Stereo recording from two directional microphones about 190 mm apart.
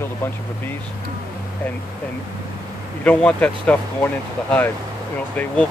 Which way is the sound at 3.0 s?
5° left (ahead or behind).